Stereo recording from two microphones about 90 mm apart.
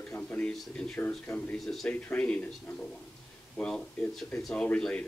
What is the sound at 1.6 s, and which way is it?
Speech, centre (ahead or behind).